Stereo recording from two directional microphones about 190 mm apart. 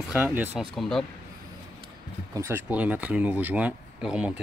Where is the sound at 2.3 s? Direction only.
10° right (ahead or behind).